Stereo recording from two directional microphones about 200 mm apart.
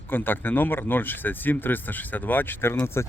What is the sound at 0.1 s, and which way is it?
Speech, 10° left (ahead or behind).